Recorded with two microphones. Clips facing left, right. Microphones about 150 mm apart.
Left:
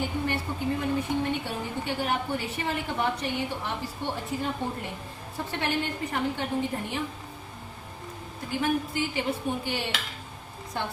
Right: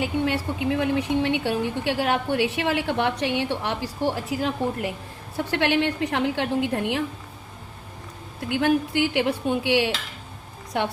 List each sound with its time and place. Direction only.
0.0 s speech: 85° right
5.5 s speech: 80° right
8.4 s speech: 85° right